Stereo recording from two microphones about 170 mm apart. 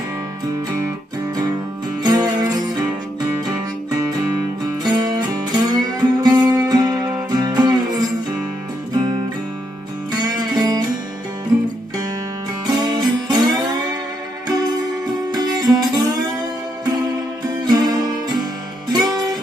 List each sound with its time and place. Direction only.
0.5 s music: 20° right (ahead or behind)
10.1 s music: 25° right (ahead or behind)
12.8 s music: 25° right (ahead or behind)